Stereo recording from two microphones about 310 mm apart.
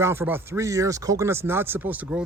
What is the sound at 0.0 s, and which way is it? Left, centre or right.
Speech, centre.